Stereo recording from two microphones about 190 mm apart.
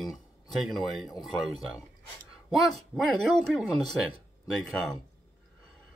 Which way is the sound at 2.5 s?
Centre (ahead or behind).